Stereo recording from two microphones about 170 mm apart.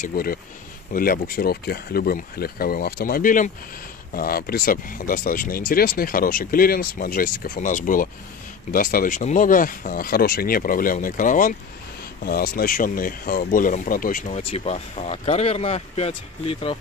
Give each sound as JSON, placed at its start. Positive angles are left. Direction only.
{"t": 0.0, "sound": "speech", "side_deg": 60}